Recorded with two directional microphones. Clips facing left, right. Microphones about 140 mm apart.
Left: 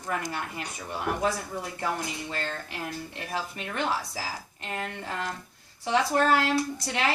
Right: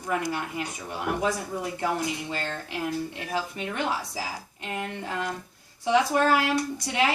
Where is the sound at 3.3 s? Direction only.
15° right (ahead or behind).